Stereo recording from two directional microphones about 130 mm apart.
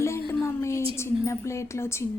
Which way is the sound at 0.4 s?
20° left (ahead or behind).